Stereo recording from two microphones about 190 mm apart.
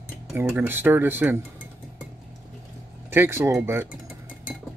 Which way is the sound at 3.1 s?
10° right (ahead or behind).